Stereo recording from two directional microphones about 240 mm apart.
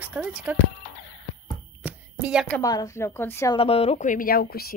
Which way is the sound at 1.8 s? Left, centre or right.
Centre.